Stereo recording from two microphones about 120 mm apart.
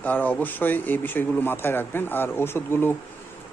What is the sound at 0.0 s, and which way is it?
A man's voice, 15° left (ahead or behind).